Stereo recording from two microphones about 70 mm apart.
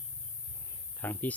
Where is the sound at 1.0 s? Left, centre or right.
Left.